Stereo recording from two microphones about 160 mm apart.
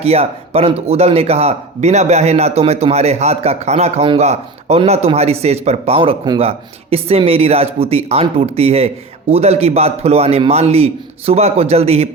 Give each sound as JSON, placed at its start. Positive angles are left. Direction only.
{"t": 0.0, "sound": "speech", "side_deg": -40}